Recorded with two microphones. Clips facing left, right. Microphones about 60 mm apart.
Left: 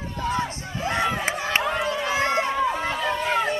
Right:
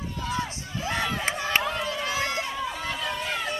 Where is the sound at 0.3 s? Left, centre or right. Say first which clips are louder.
Left 4 dB; left.